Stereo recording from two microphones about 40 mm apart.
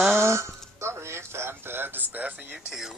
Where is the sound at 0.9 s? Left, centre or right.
Right.